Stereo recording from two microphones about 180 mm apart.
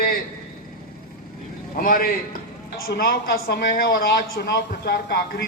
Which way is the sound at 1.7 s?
50° left (ahead or behind).